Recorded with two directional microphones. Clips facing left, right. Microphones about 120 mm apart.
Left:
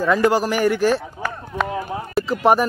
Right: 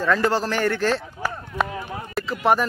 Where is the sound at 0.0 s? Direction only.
10° left (ahead or behind).